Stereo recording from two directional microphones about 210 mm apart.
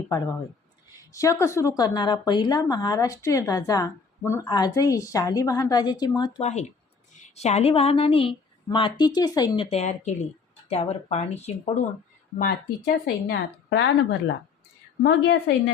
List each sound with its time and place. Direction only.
1.1 s a woman's voice: 15° left (ahead or behind); by 11.9 s 35° left (ahead or behind)
12.4 s a woman's voice: 45° left (ahead or behind)